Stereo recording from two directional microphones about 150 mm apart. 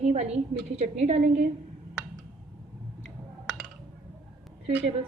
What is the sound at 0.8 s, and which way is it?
Speech, 50° right (ahead or behind).